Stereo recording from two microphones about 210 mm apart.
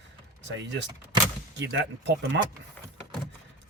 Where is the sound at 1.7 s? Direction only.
60° right (ahead or behind).